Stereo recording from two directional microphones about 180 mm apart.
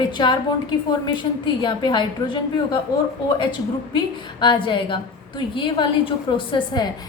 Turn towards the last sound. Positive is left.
turn(degrees=25)  # may be behind; listen again after turning